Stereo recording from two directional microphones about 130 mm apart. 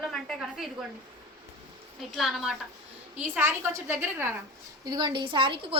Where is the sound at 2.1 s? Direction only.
Centre (ahead or behind); by 4.3 s 15° right (ahead or behind).